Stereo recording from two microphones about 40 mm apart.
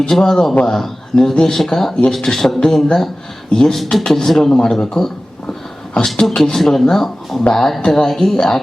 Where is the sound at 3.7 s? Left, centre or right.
Centre.